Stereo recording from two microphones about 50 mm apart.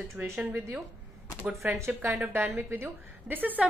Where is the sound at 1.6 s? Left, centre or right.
Right.